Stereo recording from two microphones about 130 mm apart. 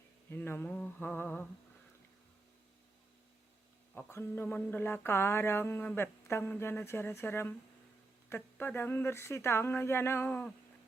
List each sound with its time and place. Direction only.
0.3 s mantra: 15° left (ahead or behind)
3.9 s mantra: 15° left (ahead or behind)
6.2 s speech: 20° left (ahead or behind)
6.5 s mantra: 15° left (ahead or behind)
8.3 s speech: 15° left (ahead or behind)